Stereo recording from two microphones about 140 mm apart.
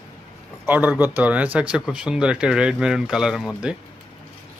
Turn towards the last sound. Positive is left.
turn(degrees=-5)  # may be behind; listen again after turning